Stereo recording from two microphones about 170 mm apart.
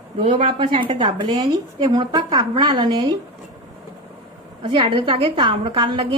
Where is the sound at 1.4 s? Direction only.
25° right (ahead or behind).